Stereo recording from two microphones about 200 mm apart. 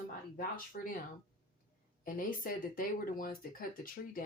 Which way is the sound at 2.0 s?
45° left (ahead or behind).